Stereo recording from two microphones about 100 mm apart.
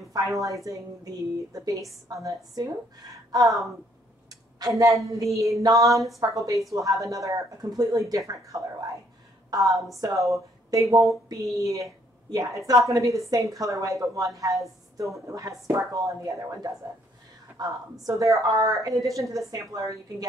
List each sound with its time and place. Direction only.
0.2 s a woman's voice: 40° right (ahead or behind)